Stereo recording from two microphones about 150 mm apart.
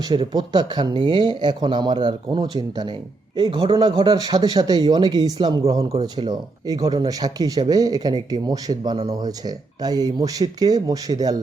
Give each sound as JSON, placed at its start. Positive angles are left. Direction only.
{"t": 0.0, "sound": "speech", "side_deg": -30}